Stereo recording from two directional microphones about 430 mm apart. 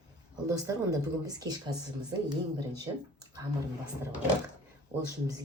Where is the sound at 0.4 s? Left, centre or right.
Centre.